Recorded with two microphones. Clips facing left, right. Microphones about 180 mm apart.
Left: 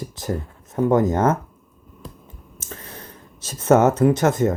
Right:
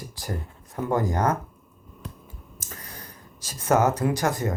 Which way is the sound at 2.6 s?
25° left (ahead or behind).